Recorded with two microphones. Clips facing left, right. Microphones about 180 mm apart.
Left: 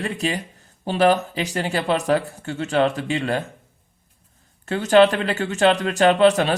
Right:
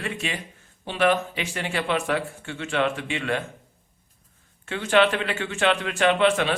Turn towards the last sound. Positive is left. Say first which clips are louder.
# left 5 dB
turn(degrees=40)  # may be behind; listen again after turning